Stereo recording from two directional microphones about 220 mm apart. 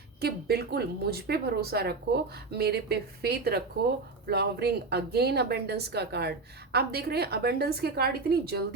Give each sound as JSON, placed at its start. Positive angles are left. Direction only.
{"t": 0.2, "sound": "a woman's voice", "side_deg": -45}